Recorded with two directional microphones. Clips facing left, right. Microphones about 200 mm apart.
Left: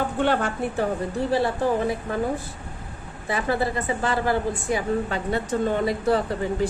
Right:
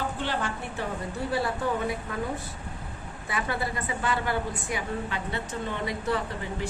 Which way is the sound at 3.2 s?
30° left (ahead or behind).